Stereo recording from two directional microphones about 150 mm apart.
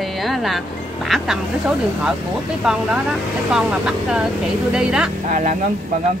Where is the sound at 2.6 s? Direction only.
5° right (ahead or behind).